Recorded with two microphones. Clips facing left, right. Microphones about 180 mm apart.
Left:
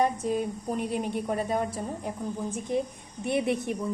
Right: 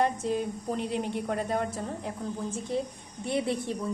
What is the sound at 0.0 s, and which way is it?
A woman's voice, 10° left (ahead or behind).